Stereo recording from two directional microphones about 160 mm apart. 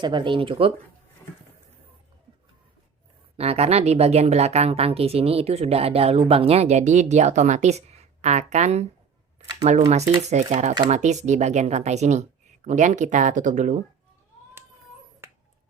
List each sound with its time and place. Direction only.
0.0 s speech: 30° right (ahead or behind)
3.3 s speech: 40° right (ahead or behind)
9.9 s speech: 45° right (ahead or behind)